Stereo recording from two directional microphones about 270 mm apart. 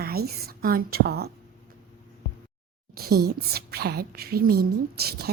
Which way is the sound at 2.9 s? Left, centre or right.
Right.